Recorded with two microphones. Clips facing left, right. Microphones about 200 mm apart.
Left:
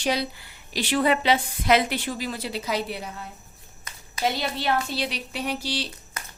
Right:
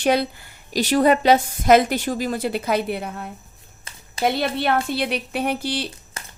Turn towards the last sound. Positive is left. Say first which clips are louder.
# right 5 dB
turn(degrees=-55)  # may be behind; listen again after turning